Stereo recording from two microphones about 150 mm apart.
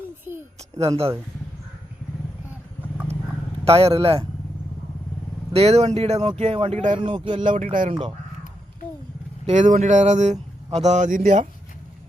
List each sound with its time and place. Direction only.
3.6 s speech: 40° right (ahead or behind)
5.5 s speech: 45° right (ahead or behind)
7.0 s speech: 35° right (ahead or behind)
7.4 s speech: 60° right (ahead or behind)
7.9 s speech: 40° right (ahead or behind)
9.5 s speech: 55° right (ahead or behind)